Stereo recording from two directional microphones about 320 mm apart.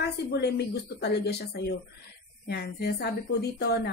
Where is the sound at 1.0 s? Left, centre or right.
Left.